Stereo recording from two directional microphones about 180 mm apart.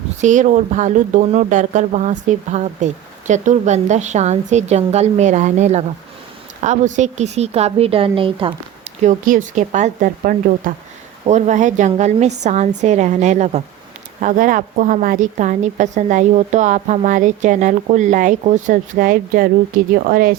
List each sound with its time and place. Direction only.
0.2 s speech: 45° right (ahead or behind)
9.0 s a woman's voice: 45° right (ahead or behind)